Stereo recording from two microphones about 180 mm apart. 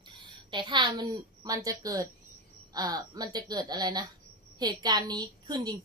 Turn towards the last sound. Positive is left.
turn(degrees=-20)  # may be behind; listen again after turning